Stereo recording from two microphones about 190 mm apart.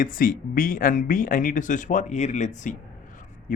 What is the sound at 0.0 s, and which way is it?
Speech, 45° left (ahead or behind).